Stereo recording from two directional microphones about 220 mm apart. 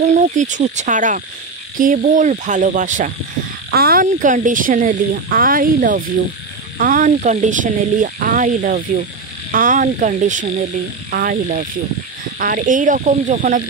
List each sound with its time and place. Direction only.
0.0 s speech: 35° right (ahead or behind)